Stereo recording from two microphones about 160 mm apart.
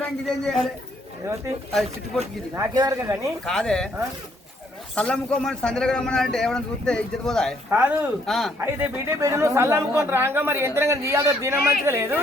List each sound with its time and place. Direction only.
0.0 s a man's voice: 5° left (ahead or behind)
2.6 s speech: 20° right (ahead or behind)
3.4 s a man's voice: 5° left (ahead or behind)
4.9 s a man's voice: 5° left (ahead or behind)
7.7 s speech: 10° right (ahead or behind)
8.3 s a man's voice: centre (ahead or behind)
8.5 s speech: 15° right (ahead or behind)